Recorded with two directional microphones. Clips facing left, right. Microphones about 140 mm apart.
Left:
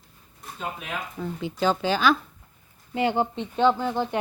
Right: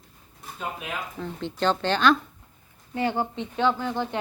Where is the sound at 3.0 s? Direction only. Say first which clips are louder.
Left 2 dB; 20° left (ahead or behind).